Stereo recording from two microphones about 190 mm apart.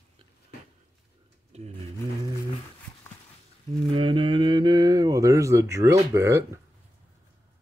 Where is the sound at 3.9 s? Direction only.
25° right (ahead or behind).